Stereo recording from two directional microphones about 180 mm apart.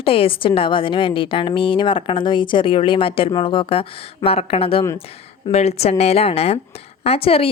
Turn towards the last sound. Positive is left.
turn(degrees=30)  # may be behind; listen again after turning